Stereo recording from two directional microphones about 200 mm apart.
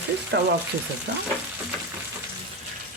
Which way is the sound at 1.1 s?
60° right (ahead or behind).